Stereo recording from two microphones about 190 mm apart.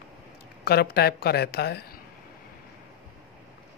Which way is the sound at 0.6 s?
55° left (ahead or behind).